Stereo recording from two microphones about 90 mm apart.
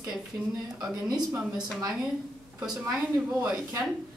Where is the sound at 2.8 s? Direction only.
15° right (ahead or behind).